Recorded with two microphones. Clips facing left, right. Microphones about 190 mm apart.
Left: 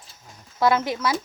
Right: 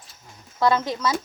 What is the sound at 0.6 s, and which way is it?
Speech, 5° left (ahead or behind).